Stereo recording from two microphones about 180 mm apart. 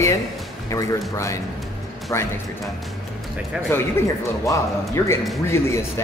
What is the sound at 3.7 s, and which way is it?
A man's voice, 15° left (ahead or behind).